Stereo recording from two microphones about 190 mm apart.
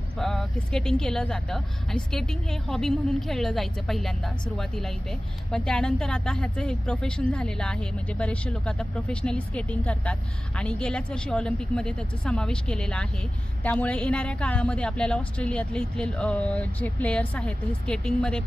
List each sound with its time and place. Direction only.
0.2 s a woman's voice: centre (ahead or behind)